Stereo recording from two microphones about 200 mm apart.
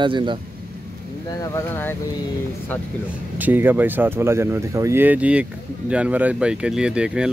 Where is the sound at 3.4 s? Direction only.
10° right (ahead or behind).